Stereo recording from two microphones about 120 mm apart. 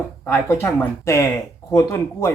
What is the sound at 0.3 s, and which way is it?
Speech, 25° left (ahead or behind).